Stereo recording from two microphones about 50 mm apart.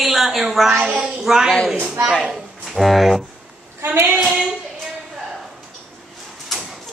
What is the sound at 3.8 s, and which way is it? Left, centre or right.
Speech, right.